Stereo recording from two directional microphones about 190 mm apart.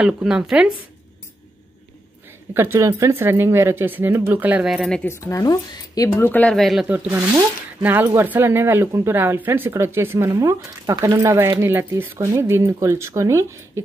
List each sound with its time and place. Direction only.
0.0 s speech: 5° right (ahead or behind)
2.5 s speech: 15° right (ahead or behind)
7.1 s speech: 10° right (ahead or behind)